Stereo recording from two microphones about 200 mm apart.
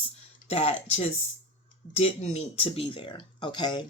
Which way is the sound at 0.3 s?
30° left (ahead or behind).